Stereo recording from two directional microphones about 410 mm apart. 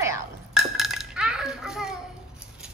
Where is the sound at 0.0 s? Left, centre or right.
Centre.